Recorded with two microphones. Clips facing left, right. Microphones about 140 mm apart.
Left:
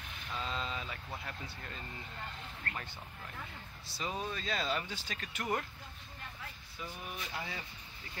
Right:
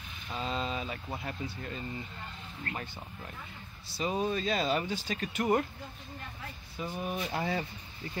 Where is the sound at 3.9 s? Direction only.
15° right (ahead or behind).